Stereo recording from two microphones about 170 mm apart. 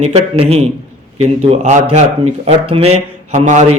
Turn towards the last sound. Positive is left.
turn(degrees=-45)  # may be behind; listen again after turning